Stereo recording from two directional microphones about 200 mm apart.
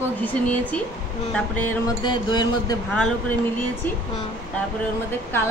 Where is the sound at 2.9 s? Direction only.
5° left (ahead or behind).